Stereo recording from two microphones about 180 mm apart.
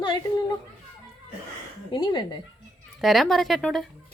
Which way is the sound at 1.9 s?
25° left (ahead or behind).